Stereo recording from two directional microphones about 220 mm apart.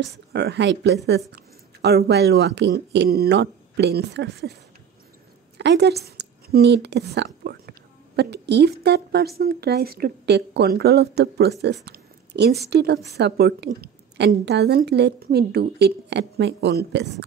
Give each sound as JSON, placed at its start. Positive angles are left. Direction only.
{"t": 0.0, "sound": "a woman's voice", "side_deg": -50}
{"t": 5.6, "sound": "a woman's voice", "side_deg": -50}
{"t": 11.8, "sound": "a sound", "side_deg": -50}
{"t": 12.6, "sound": "a woman's voice", "side_deg": -50}